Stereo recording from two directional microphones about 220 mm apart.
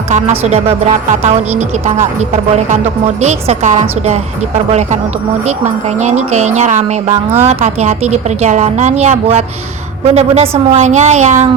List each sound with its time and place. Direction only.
0.1 s speech: 30° right (ahead or behind)
6.0 s speech: 30° right (ahead or behind)